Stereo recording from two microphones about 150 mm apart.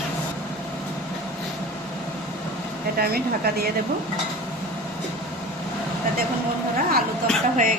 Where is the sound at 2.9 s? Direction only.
90° right.